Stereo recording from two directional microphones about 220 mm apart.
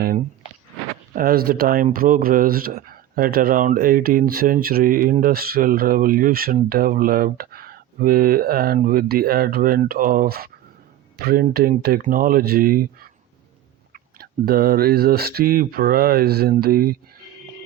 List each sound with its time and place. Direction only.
1.1 s speech: 40° right (ahead or behind)